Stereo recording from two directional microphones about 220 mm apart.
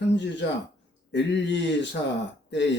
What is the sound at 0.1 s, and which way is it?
Speech, 55° left (ahead or behind).